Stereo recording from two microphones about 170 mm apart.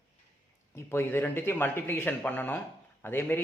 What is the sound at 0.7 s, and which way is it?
Speech, 15° left (ahead or behind).